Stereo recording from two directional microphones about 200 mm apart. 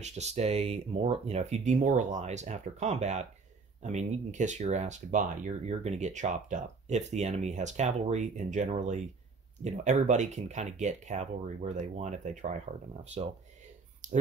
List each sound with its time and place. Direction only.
0.0 s speech: 35° right (ahead or behind)